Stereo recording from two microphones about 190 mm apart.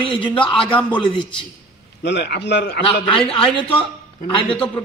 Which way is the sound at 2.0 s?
60° left (ahead or behind).